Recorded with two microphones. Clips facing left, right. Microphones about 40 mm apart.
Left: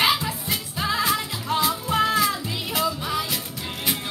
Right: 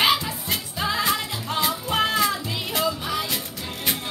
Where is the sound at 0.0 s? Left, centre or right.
Centre.